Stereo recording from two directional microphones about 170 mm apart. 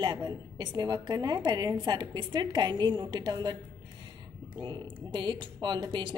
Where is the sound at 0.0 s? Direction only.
25° right (ahead or behind).